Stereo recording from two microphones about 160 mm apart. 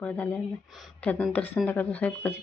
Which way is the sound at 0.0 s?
10° left (ahead or behind).